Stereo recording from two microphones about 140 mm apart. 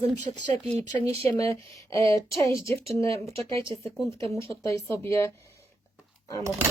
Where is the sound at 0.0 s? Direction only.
50° right (ahead or behind).